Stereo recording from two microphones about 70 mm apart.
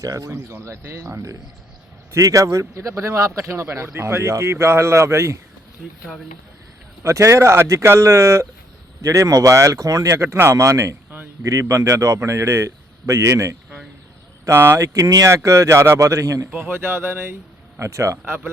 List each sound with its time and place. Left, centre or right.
0.0 s a man's voice: right
7.0 s a man's voice: right
10.5 s a man's voice: right
14.4 s speech: right
14.9 s a man's voice: right
16.5 s a man's voice: right